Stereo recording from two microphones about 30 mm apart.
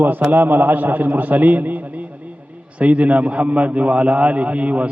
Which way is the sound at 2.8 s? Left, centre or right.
Right.